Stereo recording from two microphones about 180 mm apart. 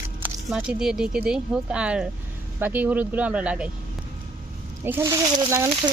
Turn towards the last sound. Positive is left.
turn(degrees=-15)  # may be behind; listen again after turning